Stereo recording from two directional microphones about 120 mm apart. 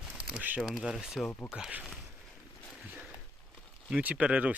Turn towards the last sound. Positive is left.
turn(degrees=-10)  # may be behind; listen again after turning